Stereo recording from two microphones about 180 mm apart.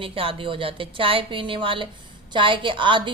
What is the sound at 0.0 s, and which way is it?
A woman's voice, 30° right (ahead or behind).